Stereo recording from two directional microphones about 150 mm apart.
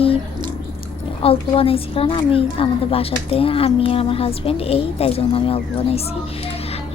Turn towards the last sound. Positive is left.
turn(degrees=40)  # may be behind; listen again after turning